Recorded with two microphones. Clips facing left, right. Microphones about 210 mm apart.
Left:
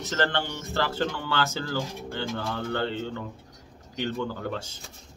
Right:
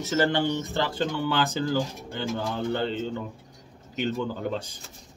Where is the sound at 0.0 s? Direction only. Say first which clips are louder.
Right 4 dB; 10° right (ahead or behind).